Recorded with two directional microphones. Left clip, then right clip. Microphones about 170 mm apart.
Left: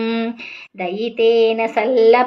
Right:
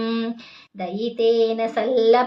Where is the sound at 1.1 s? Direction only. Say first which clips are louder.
Left 5 dB; 20° left (ahead or behind).